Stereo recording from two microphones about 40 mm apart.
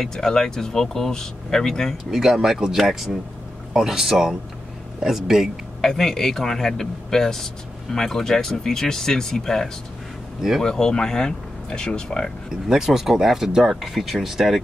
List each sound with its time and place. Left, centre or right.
0.0 s speech: centre
2.0 s speech: centre
5.8 s speech: centre
12.6 s speech: centre